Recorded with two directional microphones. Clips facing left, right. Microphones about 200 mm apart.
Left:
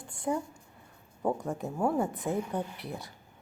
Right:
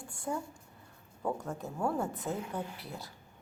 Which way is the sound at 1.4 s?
15° left (ahead or behind).